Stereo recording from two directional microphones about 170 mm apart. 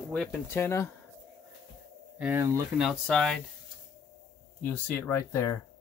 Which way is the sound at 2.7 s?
5° right (ahead or behind).